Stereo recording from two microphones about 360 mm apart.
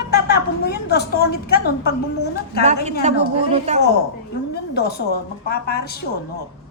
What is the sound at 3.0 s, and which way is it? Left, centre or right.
Speech, centre.